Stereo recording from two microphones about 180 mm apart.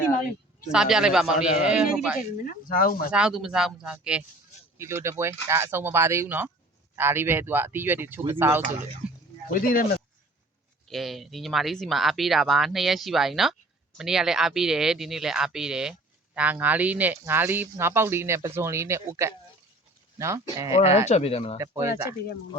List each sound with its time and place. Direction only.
0.7 s speech: 5° right (ahead or behind)
2.4 s speech: 50° left (ahead or behind)
3.1 s speech: 5° right (ahead or behind)
9.0 s a sound: 5° right (ahead or behind)
9.5 s speech: 55° left (ahead or behind)
10.8 s speech: centre (ahead or behind); by 20.7 s 15° right (ahead or behind)
20.7 s speech: 35° left (ahead or behind)
21.6 s speech: 15° right (ahead or behind)